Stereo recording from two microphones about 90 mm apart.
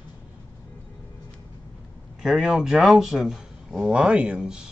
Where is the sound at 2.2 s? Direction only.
5° right (ahead or behind).